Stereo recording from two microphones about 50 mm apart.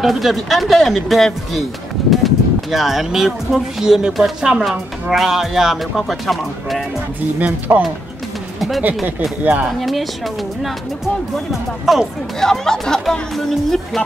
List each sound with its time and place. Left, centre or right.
0.0 s speech: centre
7.3 s speech: right
8.5 s speech: centre
11.9 s speech: centre
12.4 s speech: centre